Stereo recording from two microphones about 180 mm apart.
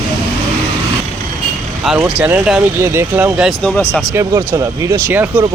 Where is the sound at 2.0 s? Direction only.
10° right (ahead or behind).